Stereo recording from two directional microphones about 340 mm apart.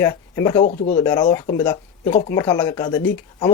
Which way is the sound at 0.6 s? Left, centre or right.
Left.